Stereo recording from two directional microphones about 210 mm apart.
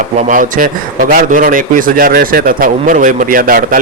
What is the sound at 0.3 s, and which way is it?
A man's voice, 40° right (ahead or behind).